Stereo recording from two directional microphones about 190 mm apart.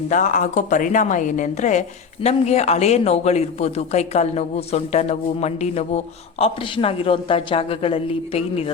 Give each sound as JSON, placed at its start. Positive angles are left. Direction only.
{"t": 0.1, "sound": "a man's voice", "side_deg": 40}